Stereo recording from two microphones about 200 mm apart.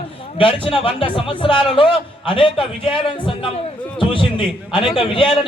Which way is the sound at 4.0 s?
25° left (ahead or behind).